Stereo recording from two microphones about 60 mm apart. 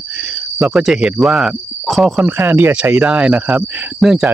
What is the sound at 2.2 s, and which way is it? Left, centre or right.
Speech, right.